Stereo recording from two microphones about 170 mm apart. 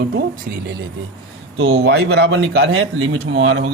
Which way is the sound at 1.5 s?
85° right.